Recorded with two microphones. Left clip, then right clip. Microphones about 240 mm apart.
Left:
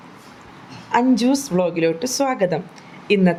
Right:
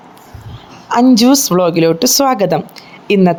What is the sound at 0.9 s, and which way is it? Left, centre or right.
A woman's voice, right.